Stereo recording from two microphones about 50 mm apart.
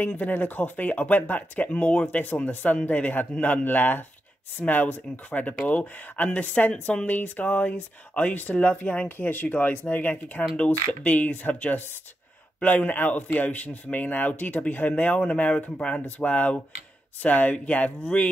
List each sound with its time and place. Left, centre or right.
0.2 s speech: left
1.7 s speech: left
15.1 s speech: left